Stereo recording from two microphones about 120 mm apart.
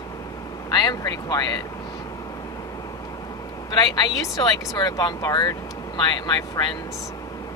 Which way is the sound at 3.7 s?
35° left (ahead or behind).